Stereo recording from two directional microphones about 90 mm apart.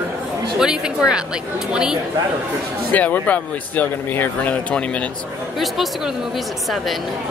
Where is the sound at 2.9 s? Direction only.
15° left (ahead or behind).